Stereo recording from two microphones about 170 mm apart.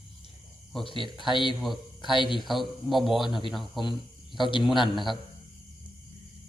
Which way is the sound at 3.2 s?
30° left (ahead or behind).